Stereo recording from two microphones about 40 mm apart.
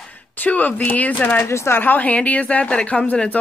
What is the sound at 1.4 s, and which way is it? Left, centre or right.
Speech, left.